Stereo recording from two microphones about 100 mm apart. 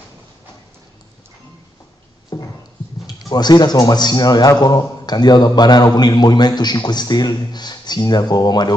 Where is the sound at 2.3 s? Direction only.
40° left (ahead or behind).